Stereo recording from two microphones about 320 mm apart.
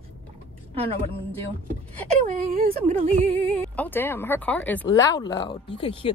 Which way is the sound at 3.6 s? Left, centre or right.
Centre.